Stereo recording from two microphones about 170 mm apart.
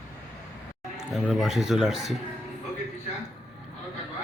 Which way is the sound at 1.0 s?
Centre (ahead or behind).